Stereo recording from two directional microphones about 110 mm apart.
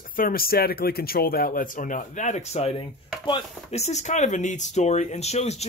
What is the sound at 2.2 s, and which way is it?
Speech, 90° left.